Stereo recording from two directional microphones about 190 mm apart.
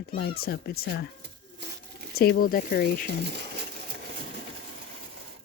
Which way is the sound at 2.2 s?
50° left (ahead or behind).